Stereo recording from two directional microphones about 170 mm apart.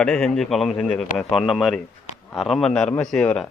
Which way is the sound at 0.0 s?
5° left (ahead or behind).